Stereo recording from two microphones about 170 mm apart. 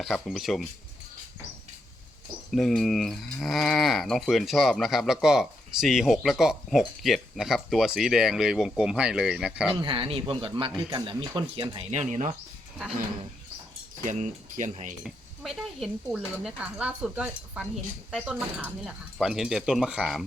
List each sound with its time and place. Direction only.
0.0 s cricket: centre (ahead or behind)
2.5 s cricket: centre (ahead or behind)
9.7 s speech: 30° right (ahead or behind)
11.9 s speech: 40° right (ahead or behind)
14.0 s speech: 45° right (ahead or behind)
15.0 s cricket: centre (ahead or behind)